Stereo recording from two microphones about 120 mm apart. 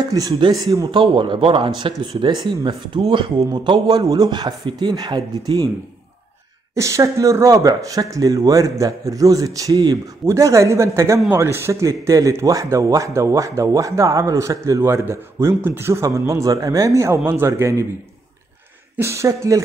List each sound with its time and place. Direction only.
0.1 s a man's voice: 30° right (ahead or behind)
6.7 s speech: 25° right (ahead or behind)
18.9 s speech: 25° right (ahead or behind)